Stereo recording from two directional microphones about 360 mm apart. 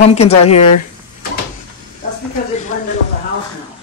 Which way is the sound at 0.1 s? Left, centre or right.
Centre.